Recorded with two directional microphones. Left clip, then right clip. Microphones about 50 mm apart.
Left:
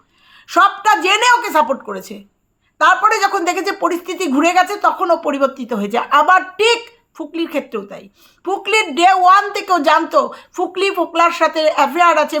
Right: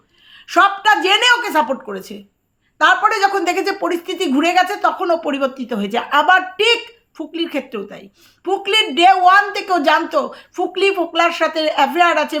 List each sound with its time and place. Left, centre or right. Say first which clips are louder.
0.3 s a woman's voice: left 1 dB; left